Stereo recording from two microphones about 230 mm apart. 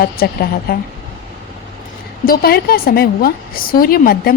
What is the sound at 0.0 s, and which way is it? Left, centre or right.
Speech, left.